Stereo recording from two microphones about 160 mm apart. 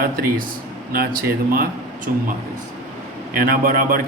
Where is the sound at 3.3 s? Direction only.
60° right (ahead or behind).